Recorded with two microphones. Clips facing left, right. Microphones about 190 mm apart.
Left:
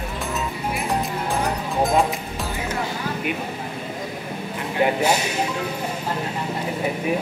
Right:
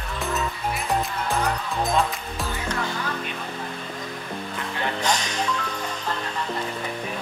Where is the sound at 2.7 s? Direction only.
10° left (ahead or behind).